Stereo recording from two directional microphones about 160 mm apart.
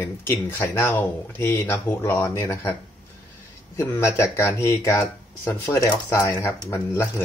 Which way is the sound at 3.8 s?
15° left (ahead or behind).